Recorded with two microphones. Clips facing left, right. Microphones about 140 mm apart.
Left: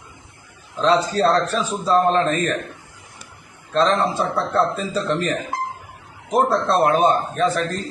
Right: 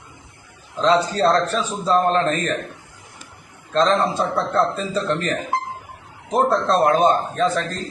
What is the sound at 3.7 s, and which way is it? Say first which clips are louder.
A man's voice: even; 10° left (ahead or behind).